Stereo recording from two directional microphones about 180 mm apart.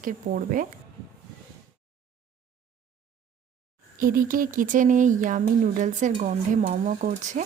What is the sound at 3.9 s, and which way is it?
Speech, 50° right (ahead or behind).